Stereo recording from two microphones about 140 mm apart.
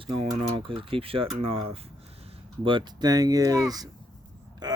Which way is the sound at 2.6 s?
30° right (ahead or behind).